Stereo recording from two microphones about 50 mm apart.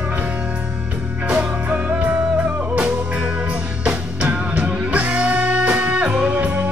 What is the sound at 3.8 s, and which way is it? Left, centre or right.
Music, right.